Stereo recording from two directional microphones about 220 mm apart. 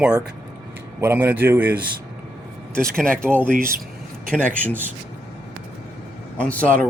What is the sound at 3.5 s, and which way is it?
Speech, 40° right (ahead or behind).